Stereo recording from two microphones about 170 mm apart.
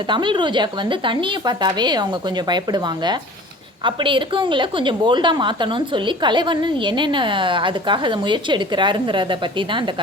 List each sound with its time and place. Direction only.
0.1 s a woman's voice: 30° right (ahead or behind)